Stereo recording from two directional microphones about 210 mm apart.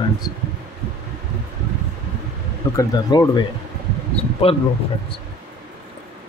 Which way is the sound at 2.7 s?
15° left (ahead or behind).